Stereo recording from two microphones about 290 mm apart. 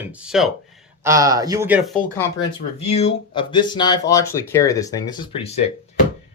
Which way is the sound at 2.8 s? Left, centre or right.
Left.